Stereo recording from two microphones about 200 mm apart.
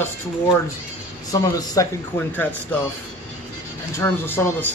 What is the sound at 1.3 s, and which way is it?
Speech, 20° left (ahead or behind).